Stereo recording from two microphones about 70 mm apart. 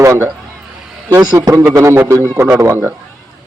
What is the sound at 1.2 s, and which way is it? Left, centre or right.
Speech, right.